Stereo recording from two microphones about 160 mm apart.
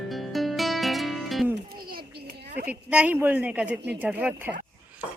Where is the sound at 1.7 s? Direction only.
70° right (ahead or behind).